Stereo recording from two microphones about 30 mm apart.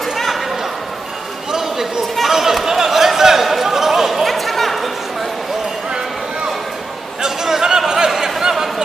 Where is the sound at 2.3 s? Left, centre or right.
Centre.